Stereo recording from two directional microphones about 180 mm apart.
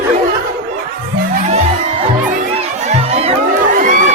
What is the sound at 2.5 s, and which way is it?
Crowd, 35° right (ahead or behind).